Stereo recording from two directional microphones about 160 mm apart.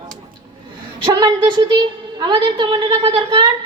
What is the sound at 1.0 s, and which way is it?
A woman's voice, 25° right (ahead or behind).